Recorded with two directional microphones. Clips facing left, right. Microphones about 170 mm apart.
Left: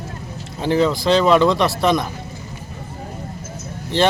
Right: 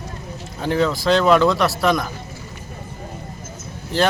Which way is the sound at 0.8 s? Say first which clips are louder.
Even; centre (ahead or behind).